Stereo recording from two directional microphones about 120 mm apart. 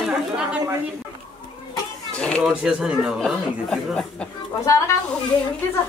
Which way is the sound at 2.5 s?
5° right (ahead or behind).